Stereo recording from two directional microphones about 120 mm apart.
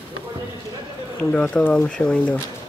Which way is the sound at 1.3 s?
10° left (ahead or behind).